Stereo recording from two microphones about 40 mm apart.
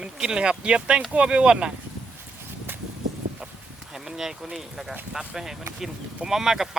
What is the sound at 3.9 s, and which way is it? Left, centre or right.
Speech, centre.